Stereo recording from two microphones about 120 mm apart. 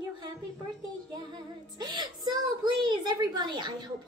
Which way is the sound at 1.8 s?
35° right (ahead or behind).